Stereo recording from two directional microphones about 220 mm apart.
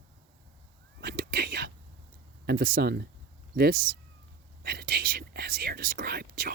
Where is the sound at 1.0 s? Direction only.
45° right (ahead or behind).